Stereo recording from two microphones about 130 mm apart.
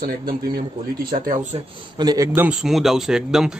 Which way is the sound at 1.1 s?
90° right.